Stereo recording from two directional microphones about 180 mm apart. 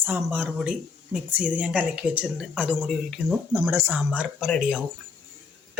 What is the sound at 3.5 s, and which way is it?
A man's voice, 15° right (ahead or behind).